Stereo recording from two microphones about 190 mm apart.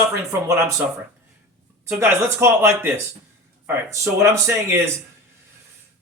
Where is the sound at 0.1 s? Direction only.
15° right (ahead or behind).